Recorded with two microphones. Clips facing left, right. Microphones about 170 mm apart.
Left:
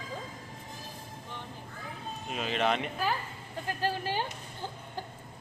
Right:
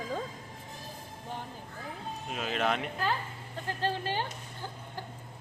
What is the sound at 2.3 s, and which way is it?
Speech, centre (ahead or behind).